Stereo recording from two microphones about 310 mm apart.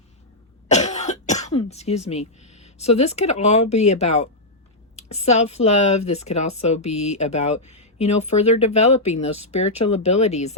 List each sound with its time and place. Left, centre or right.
0.7 s cough: left
3.7 s speech: left